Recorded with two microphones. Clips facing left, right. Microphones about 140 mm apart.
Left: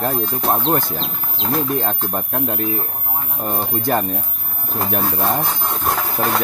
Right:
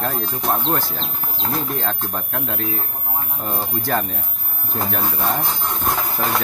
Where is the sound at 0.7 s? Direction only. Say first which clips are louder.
Left 3 dB; 50° left (ahead or behind).